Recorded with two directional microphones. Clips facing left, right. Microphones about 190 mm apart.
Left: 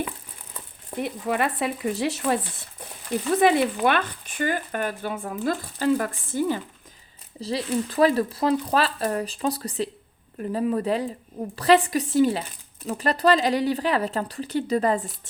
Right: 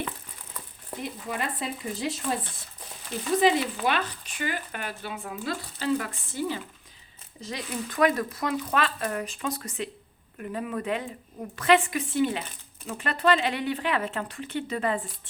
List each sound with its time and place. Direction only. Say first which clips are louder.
1.0 s speech: left 7 dB; 65° left (ahead or behind)
3.4 s speech: left 4 dB; 55° left (ahead or behind)
7.4 s speech: left 8 dB; 30° left (ahead or behind)